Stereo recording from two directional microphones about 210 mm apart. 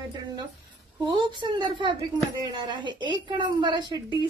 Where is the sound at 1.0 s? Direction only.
20° right (ahead or behind).